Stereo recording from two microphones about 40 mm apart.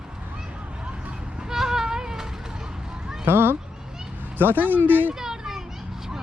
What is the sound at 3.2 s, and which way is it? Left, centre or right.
Speech, right.